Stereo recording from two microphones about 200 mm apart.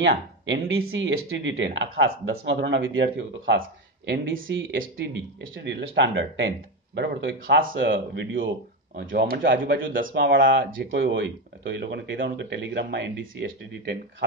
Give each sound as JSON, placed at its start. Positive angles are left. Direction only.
{"t": 0.0, "sound": "speech", "side_deg": -65}
{"t": 7.9, "sound": "speech", "side_deg": -60}
{"t": 9.8, "sound": "speech", "side_deg": -70}
{"t": 10.6, "sound": "speech", "side_deg": -45}
{"t": 10.9, "sound": "speech", "side_deg": -55}